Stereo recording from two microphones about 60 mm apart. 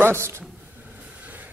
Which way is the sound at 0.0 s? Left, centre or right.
Right.